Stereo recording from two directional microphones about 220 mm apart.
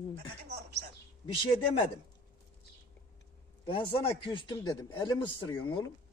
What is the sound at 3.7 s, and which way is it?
Speech, 20° left (ahead or behind).